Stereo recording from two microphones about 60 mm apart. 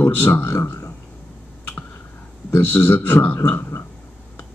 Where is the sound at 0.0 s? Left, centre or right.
Left.